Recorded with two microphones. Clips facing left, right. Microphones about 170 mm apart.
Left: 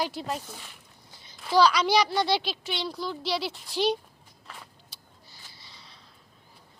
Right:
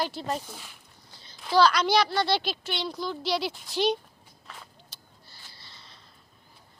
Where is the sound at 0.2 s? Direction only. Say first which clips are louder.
Right 1 dB; 5° left (ahead or behind).